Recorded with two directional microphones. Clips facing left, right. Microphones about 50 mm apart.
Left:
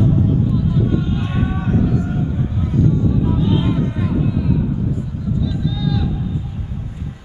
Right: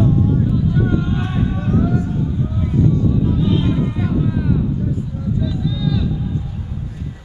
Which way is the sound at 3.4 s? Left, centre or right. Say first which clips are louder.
Even; centre.